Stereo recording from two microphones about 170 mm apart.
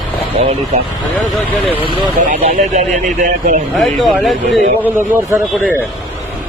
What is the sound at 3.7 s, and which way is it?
Speech, centre (ahead or behind).